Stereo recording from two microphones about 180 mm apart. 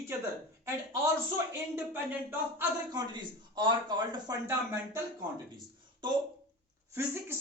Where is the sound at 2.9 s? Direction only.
25° right (ahead or behind).